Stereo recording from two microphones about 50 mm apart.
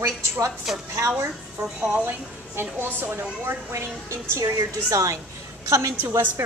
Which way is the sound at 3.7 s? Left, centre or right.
Right.